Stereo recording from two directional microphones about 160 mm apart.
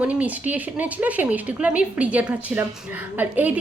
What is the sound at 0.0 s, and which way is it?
A woman's voice, 10° right (ahead or behind).